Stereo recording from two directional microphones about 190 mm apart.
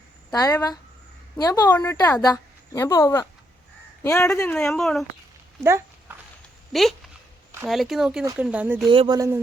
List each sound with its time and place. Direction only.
0.3 s a woman's voice: 20° left (ahead or behind); by 5.0 s centre (ahead or behind)
5.6 s walk: 15° right (ahead or behind)
6.7 s speech: centre (ahead or behind)
8.2 s speech: 15° right (ahead or behind)
8.9 s speech: 25° right (ahead or behind)